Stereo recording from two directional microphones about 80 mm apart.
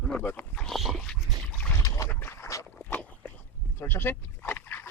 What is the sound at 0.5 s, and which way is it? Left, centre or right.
Dog, centre.